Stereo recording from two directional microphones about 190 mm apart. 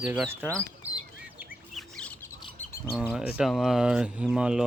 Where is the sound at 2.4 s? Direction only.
40° left (ahead or behind).